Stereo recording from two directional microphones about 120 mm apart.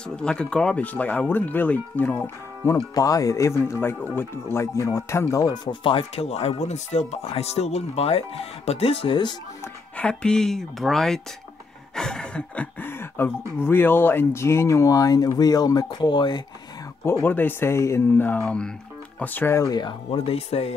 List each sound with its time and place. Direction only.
0.1 s speech: 5° left (ahead or behind); by 9.3 s 45° left (ahead or behind)
9.9 s speech: 5° left (ahead or behind); by 16.4 s 40° left (ahead or behind)
17.2 s speech: 15° left (ahead or behind); by 20.0 s 35° left (ahead or behind)
20.1 s speech: 60° left (ahead or behind)